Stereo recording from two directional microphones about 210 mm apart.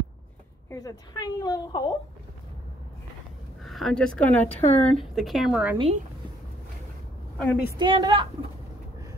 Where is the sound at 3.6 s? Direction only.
Centre (ahead or behind).